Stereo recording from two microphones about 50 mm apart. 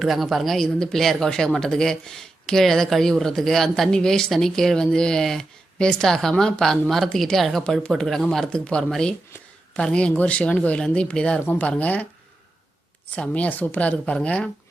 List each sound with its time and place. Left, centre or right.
0.0 s speech: centre
8.4 s speech: centre
13.3 s speech: left